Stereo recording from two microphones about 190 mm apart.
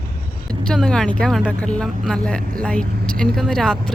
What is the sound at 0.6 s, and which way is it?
Speech, 5° left (ahead or behind).